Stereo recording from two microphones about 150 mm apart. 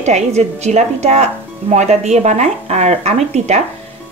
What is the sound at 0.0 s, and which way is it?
Speech, 50° right (ahead or behind).